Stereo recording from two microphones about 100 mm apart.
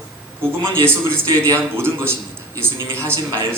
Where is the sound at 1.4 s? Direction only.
25° right (ahead or behind).